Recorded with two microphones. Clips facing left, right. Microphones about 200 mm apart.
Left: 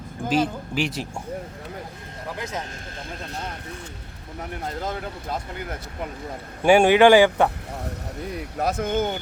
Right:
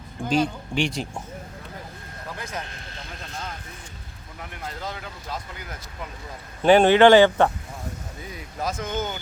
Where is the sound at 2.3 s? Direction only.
20° left (ahead or behind).